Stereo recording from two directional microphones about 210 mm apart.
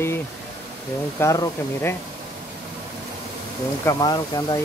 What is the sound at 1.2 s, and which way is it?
Speech, 15° left (ahead or behind).